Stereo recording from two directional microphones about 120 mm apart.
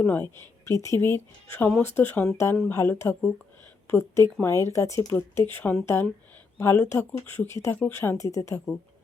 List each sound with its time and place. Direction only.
0.0 s speech: 15° left (ahead or behind)